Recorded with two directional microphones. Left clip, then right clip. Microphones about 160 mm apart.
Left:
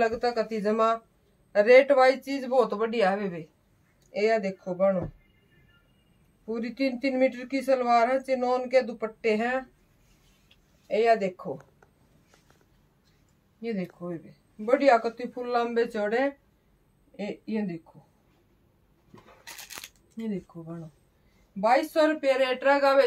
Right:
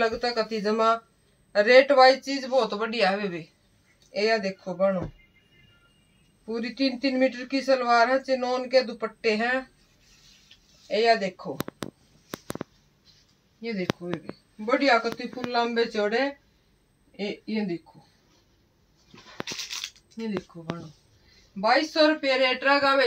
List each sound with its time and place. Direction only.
0.0 s speech: 15° left (ahead or behind); by 3.4 s 30° left (ahead or behind)
4.1 s speech: 10° left (ahead or behind)
6.4 s speech: 10° left (ahead or behind)
10.9 s speech: 10° left (ahead or behind)
13.6 s speech: 25° left (ahead or behind)
14.6 s speech: 15° left (ahead or behind)
21.5 s speech: 20° left (ahead or behind)